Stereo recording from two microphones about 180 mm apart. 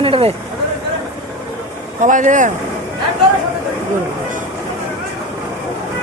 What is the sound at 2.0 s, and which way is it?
Speech, 45° right (ahead or behind).